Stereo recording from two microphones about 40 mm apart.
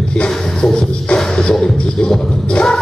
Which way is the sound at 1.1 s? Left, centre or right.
Centre.